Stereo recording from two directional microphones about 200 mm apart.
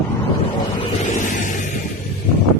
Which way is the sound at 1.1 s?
40° left (ahead or behind).